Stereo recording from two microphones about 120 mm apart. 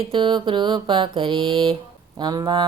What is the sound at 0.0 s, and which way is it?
Mantra, 40° right (ahead or behind).